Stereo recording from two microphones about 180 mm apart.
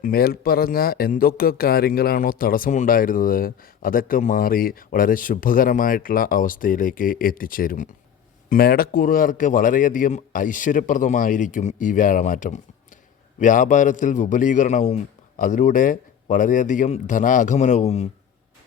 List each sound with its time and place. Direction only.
0.0 s speech: 55° left (ahead or behind); by 18.1 s 35° left (ahead or behind)